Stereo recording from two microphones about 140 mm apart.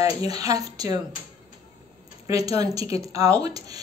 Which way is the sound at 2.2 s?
25° right (ahead or behind).